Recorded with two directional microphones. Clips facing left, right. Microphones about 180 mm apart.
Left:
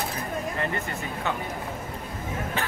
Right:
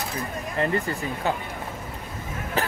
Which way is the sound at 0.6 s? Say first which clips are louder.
Right 5 dB; 35° right (ahead or behind).